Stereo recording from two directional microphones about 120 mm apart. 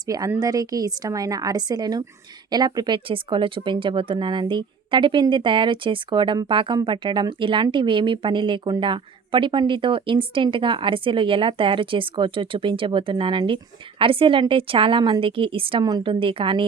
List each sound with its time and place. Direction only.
0.3 s speech: 30° right (ahead or behind); by 15.8 s 50° right (ahead or behind)
15.8 s speech: 35° right (ahead or behind)